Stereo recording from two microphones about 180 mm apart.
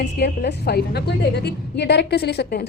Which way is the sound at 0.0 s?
65° left (ahead or behind).